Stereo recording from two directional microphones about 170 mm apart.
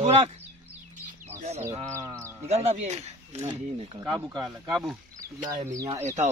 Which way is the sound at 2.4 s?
40° right (ahead or behind).